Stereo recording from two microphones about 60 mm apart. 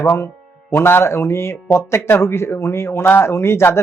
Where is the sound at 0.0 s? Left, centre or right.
Left.